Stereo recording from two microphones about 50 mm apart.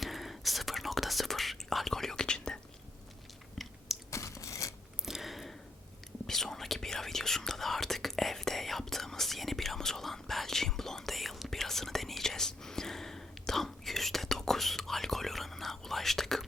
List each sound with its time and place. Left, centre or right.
0.0 s whispering: centre
4.1 s crunch: left
5.0 s a sound: centre
6.2 s whispering: centre